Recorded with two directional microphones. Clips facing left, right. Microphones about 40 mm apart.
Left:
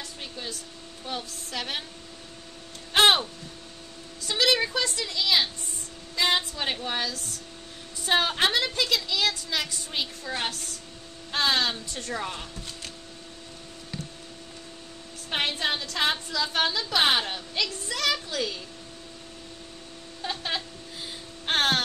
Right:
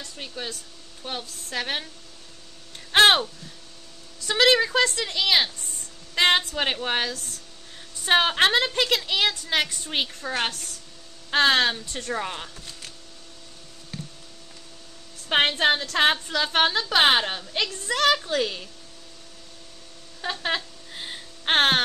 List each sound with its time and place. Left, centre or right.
0.4 s speech: right
1.5 s a woman's voice: right
2.9 s a sound: right
4.3 s a woman's voice: right
15.2 s a woman's voice: right
20.2 s a sound: right